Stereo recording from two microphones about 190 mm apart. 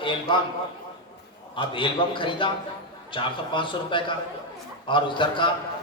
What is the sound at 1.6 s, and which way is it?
A man's voice, 25° left (ahead or behind).